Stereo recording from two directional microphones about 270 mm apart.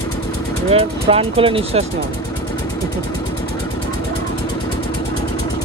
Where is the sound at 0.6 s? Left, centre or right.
Right.